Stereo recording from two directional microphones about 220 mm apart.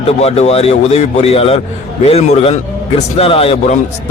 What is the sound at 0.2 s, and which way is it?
A man's voice, 30° left (ahead or behind).